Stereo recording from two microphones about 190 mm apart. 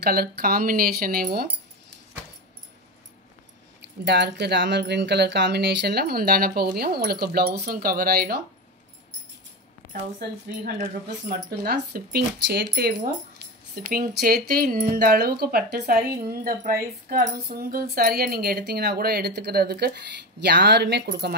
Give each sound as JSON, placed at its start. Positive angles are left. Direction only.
{"t": 0.0, "sound": "speech", "side_deg": -55}
{"t": 3.8, "sound": "speech", "side_deg": -65}
{"t": 11.2, "sound": "speech", "side_deg": -55}